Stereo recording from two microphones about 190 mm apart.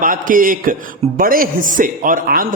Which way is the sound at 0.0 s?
45° right (ahead or behind).